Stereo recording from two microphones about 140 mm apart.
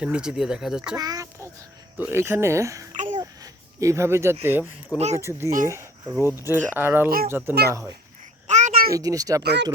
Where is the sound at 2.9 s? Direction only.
65° right (ahead or behind).